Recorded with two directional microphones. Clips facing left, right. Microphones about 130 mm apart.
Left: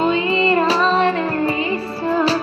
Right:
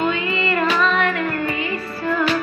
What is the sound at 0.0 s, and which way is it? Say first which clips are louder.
Child singing: left 4 dB; 30° left (ahead or behind).